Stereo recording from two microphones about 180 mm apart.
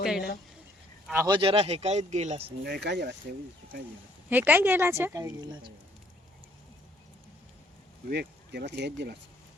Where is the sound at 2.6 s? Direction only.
65° right (ahead or behind).